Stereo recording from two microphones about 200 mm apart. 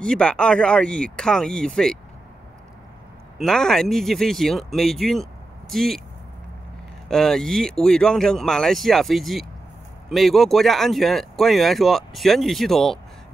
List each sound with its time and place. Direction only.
0.0 s speech: 5° left (ahead or behind)
3.3 s speech: centre (ahead or behind)
7.1 s speech: centre (ahead or behind)